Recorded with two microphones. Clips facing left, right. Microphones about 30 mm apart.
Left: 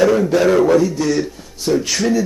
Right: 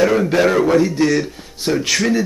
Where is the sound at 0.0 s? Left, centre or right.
Right.